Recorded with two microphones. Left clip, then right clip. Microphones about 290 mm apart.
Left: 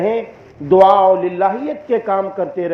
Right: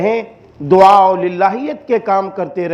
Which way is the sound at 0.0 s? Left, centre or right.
Right.